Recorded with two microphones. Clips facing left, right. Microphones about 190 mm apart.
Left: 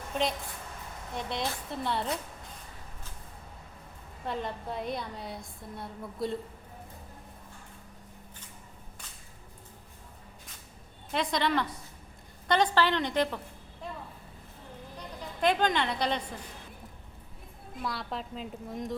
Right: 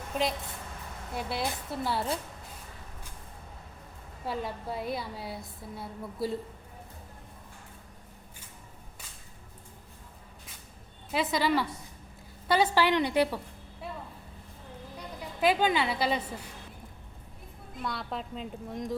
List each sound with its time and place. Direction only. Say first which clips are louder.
0.1 s a woman's voice: even; centre (ahead or behind)
4.3 s a woman's voice: even; 5° right (ahead or behind)
11.1 s a woman's voice: right 1 dB; 5° right (ahead or behind)
14.9 s a woman's voice: right 1 dB; 5° right (ahead or behind)
17.8 s a woman's voice: even; centre (ahead or behind)